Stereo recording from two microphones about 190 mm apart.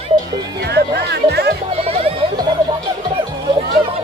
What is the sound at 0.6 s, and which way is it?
Music, 60° right (ahead or behind).